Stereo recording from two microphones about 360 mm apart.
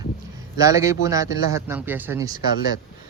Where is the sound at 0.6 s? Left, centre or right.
Centre.